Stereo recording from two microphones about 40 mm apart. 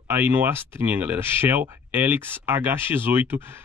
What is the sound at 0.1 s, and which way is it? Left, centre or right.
Speech, right.